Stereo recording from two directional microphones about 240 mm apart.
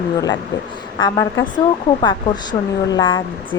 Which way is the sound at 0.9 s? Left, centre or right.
Centre.